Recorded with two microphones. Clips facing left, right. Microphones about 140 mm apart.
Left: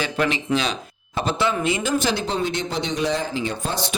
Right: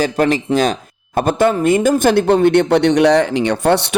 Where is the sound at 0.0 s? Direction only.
45° right (ahead or behind).